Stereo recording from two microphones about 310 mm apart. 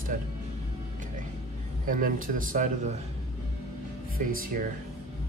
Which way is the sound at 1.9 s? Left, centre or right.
Right.